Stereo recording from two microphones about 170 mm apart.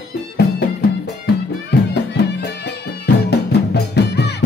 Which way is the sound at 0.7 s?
75° left (ahead or behind).